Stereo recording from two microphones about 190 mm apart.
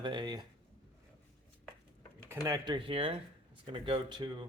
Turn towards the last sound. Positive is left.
turn(degrees=-25)  # may be behind; listen again after turning